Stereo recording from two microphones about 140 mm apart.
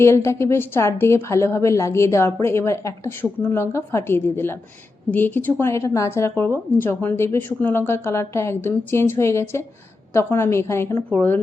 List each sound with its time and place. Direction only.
0.0 s a woman's voice: 20° left (ahead or behind)